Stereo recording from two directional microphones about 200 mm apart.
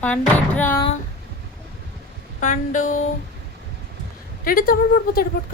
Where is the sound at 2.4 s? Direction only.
40° left (ahead or behind).